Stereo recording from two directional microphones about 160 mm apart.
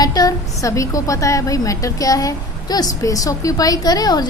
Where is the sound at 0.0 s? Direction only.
25° left (ahead or behind).